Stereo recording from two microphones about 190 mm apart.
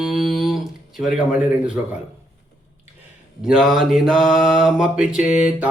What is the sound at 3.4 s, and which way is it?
Speech, 5° right (ahead or behind).